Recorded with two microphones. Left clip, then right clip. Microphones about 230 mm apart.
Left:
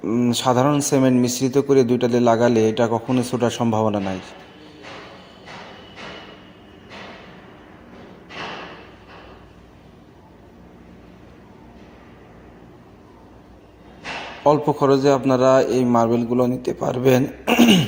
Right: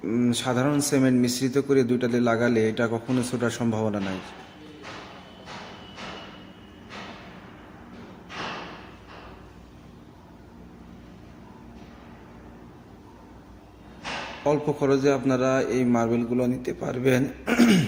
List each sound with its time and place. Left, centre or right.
0.2 s speech: centre
14.4 s speech: centre